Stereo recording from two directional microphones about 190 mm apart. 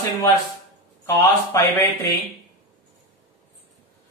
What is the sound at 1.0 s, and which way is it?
Speech, 20° left (ahead or behind).